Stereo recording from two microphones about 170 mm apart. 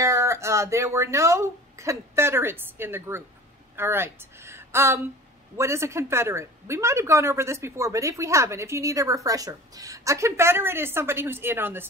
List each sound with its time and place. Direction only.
0.0 s a woman's voice: 20° right (ahead or behind)